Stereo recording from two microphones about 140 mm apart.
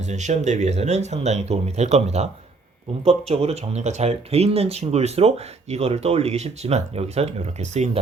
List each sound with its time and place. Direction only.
0.0 s speech: 55° right (ahead or behind)